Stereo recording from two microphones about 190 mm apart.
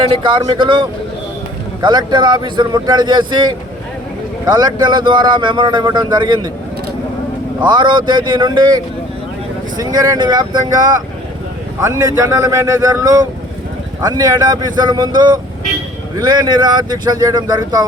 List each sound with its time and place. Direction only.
0.3 s speech: 25° right (ahead or behind)
4.5 s speech: 20° right (ahead or behind)
7.6 s speech: 25° right (ahead or behind)
11.9 s a man's voice: 15° right (ahead or behind)